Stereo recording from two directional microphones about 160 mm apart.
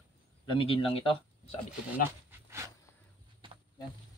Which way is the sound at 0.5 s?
35° left (ahead or behind).